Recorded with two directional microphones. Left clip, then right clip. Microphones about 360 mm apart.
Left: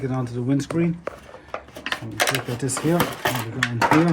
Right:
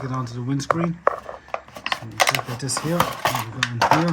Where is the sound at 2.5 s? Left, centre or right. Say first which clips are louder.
Left 3 dB; centre.